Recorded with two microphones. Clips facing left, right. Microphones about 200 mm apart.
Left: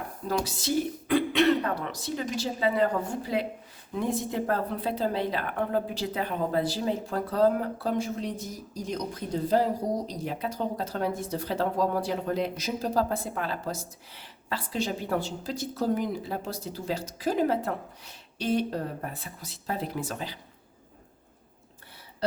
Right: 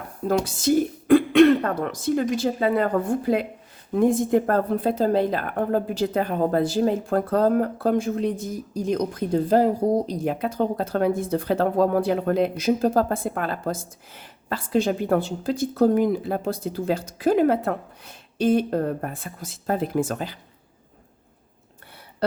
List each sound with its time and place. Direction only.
0.4 s a woman's voice: 50° right (ahead or behind)